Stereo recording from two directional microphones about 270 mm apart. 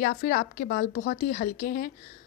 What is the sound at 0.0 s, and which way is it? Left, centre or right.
Speech, left.